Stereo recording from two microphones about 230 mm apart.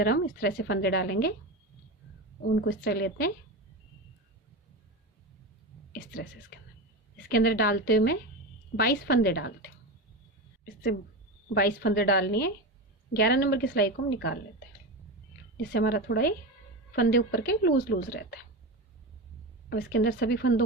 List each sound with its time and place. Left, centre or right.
0.0 s a woman's voice: left
2.6 s a woman's voice: left
7.3 s a woman's voice: left
11.5 s a woman's voice: left
15.7 s a woman's voice: left
19.7 s a woman's voice: left